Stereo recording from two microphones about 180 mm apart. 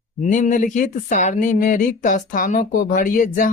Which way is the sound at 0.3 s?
45° left (ahead or behind).